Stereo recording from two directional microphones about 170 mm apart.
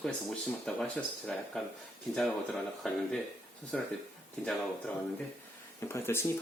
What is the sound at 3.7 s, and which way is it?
Speech, 5° left (ahead or behind).